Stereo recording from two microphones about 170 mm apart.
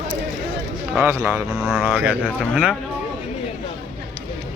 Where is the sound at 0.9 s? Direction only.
15° right (ahead or behind).